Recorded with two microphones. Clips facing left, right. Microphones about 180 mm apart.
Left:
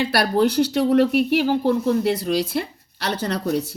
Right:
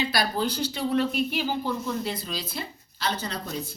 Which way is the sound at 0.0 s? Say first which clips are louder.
Left 8 dB; 70° left (ahead or behind).